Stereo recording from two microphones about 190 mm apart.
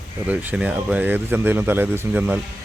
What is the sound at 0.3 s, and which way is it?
Speech, 10° right (ahead or behind).